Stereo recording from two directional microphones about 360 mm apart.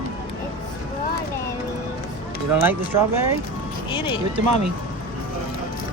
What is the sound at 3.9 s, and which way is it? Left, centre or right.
Speech, centre.